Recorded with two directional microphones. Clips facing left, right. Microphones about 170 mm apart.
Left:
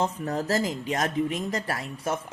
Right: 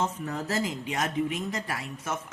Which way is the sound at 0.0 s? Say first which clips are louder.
Left 3 dB; 40° left (ahead or behind).